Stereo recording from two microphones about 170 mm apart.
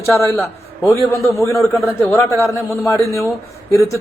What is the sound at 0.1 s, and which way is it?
A man's voice, 15° left (ahead or behind).